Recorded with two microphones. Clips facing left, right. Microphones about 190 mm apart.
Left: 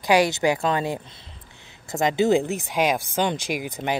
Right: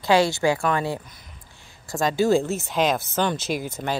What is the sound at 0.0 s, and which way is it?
A woman's voice, 15° left (ahead or behind).